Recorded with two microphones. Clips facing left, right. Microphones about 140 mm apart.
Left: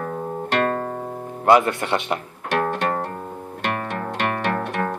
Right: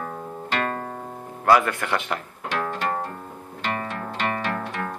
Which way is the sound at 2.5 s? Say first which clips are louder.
Left 5 dB; 65° left (ahead or behind).